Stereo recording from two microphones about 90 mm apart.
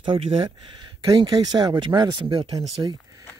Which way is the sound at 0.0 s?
90° right.